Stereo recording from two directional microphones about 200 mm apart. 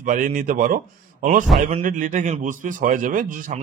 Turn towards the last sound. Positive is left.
turn(degrees=-40)  # may be behind; listen again after turning